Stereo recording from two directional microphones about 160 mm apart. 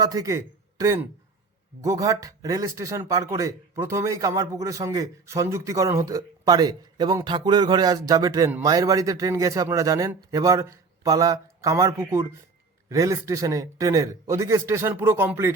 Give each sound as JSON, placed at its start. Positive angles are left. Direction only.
{"t": 0.0, "sound": "a man's voice", "side_deg": -20}